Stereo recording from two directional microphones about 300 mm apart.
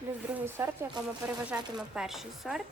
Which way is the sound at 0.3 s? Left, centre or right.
Centre.